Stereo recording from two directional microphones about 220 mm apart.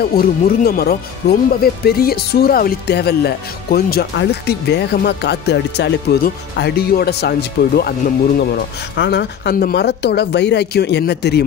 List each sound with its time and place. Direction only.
0.0 s speech: 45° left (ahead or behind)